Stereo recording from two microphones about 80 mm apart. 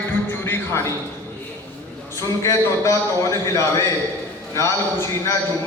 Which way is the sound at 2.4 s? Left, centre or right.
Left.